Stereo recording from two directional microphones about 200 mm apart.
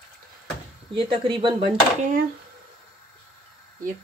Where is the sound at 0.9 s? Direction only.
25° right (ahead or behind).